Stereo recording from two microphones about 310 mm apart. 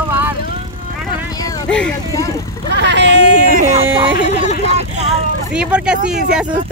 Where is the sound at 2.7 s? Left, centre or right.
Right.